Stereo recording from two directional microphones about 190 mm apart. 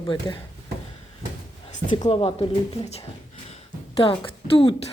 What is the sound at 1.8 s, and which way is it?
Speech, 25° left (ahead or behind).